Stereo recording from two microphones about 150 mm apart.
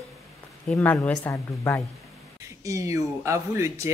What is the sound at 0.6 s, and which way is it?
Speech, 10° left (ahead or behind).